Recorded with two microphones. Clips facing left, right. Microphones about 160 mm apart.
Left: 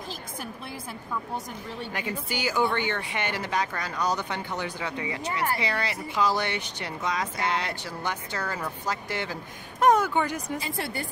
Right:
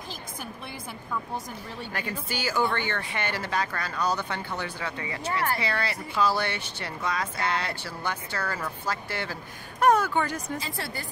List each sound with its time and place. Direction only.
1.9 s speech: 15° left (ahead or behind)